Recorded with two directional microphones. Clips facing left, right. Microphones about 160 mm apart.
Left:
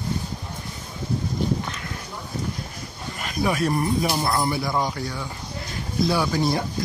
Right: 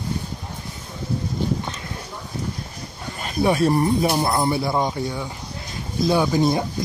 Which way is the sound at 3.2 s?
30° right (ahead or behind).